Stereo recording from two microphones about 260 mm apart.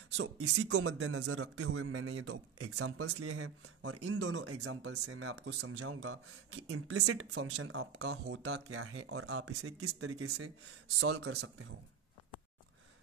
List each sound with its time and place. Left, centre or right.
0.2 s a man's voice: right